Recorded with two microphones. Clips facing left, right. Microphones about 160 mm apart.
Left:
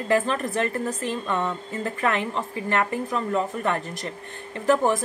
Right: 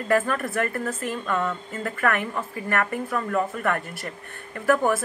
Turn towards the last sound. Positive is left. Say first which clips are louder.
# left 1 dB
turn(degrees=20)  # may be behind; listen again after turning